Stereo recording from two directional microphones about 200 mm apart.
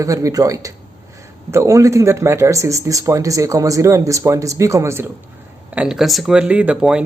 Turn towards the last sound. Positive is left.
turn(degrees=-5)  # may be behind; listen again after turning